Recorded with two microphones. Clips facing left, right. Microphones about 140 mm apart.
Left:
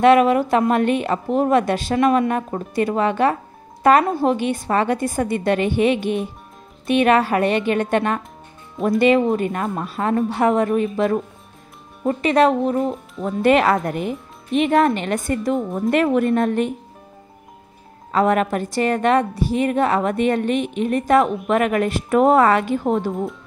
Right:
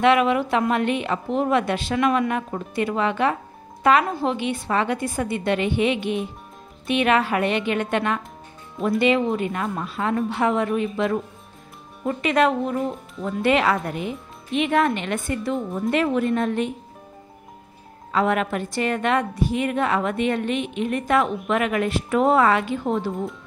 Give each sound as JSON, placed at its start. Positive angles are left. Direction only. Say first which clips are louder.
{"t": 0.0, "sound": "a woman's voice", "louder": "left 5 dB", "side_deg": 40}
{"t": 12.8, "sound": "speech", "louder": "left 4 dB", "side_deg": 0}
{"t": 13.2, "sound": "a woman's voice", "louder": "left 4 dB", "side_deg": 45}
{"t": 15.9, "sound": "a woman's voice", "louder": "left 4 dB", "side_deg": 50}
{"t": 18.1, "sound": "a woman's voice", "louder": "left 4 dB", "side_deg": 40}